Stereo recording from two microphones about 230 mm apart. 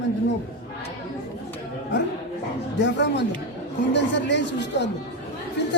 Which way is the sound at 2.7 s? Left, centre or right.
Left.